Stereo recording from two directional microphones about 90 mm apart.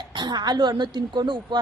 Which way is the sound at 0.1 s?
55° right (ahead or behind).